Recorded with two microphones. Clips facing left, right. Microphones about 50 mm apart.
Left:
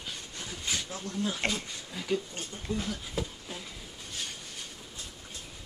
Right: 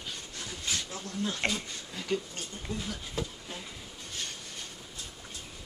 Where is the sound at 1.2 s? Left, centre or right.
Centre.